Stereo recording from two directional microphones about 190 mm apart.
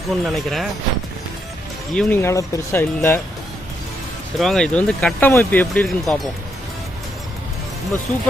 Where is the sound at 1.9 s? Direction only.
5° left (ahead or behind).